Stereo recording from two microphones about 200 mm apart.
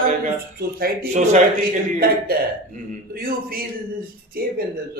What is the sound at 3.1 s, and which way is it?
Speech, 50° right (ahead or behind).